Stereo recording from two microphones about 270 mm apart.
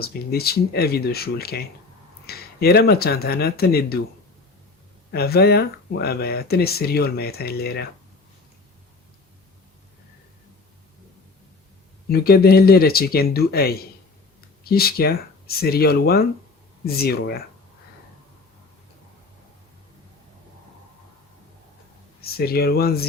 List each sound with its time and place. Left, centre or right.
0.0 s speech: left
5.1 s speech: left
12.0 s speech: left
22.2 s speech: left